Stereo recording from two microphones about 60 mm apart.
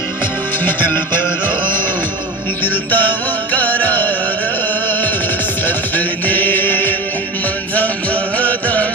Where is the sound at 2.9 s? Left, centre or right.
Left.